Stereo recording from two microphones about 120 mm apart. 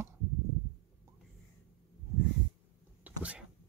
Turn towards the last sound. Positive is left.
turn(degrees=-10)  # may be behind; listen again after turning